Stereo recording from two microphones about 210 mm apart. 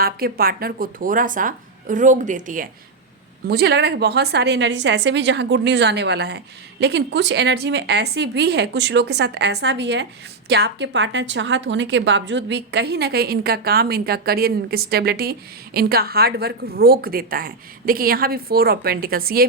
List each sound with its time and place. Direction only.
0.0 s speech: 45° right (ahead or behind)
3.4 s a woman's voice: 50° right (ahead or behind)